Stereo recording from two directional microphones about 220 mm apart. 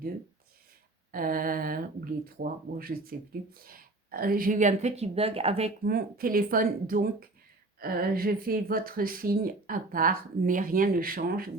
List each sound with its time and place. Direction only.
1.1 s speech: 40° right (ahead or behind)
5.8 s speech: 45° right (ahead or behind)